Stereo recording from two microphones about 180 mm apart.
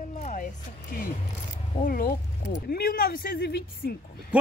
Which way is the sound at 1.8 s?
55° left (ahead or behind).